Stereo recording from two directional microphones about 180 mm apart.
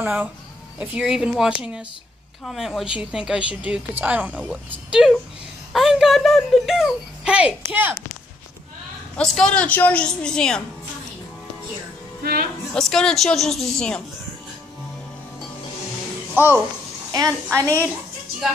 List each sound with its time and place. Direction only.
0.0 s a woman's voice: 10° right (ahead or behind)
5.7 s a sound: centre (ahead or behind)
9.1 s a woman's voice: 5° left (ahead or behind)
12.2 s a woman's voice: 55° right (ahead or behind)
12.7 s a woman's voice: 5° left (ahead or behind)
17.5 s a woman's voice: 15° right (ahead or behind)